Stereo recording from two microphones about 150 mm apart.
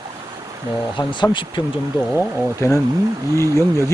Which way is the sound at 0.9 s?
30° left (ahead or behind).